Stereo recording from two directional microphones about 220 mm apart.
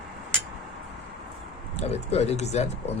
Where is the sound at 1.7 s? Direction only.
30° left (ahead or behind).